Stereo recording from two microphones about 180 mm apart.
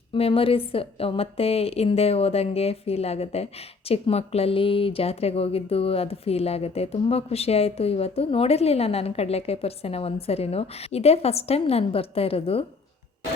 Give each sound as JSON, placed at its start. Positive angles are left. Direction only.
{"t": 0.1, "sound": "a woman's voice", "side_deg": 30}